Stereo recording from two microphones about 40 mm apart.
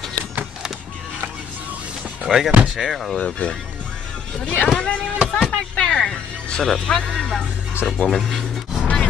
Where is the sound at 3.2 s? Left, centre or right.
Left.